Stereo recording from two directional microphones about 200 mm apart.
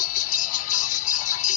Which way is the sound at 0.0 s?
40° left (ahead or behind).